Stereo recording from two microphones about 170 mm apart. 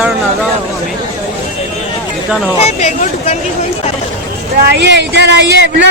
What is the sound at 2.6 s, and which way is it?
Speech, 40° left (ahead or behind).